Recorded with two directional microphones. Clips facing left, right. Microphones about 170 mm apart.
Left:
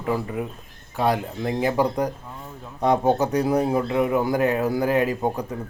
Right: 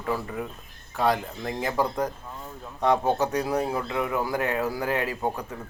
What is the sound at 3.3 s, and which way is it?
A man's voice, 30° left (ahead or behind).